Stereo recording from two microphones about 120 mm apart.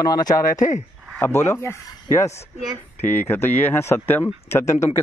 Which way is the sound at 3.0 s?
20° left (ahead or behind).